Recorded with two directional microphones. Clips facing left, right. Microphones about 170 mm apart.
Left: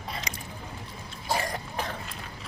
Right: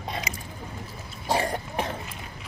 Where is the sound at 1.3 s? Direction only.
30° right (ahead or behind).